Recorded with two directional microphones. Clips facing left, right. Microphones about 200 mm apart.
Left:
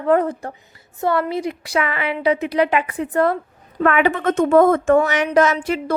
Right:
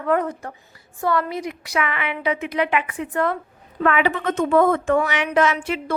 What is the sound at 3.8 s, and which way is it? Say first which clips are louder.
A woman's voice: left 3 dB; 50° left (ahead or behind).